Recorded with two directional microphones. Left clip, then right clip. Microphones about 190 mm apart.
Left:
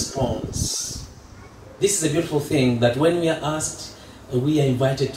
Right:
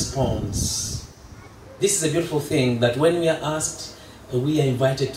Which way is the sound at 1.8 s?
30° right (ahead or behind).